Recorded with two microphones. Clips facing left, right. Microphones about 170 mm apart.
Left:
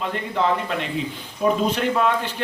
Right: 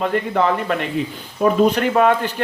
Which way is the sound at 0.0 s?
55° right (ahead or behind).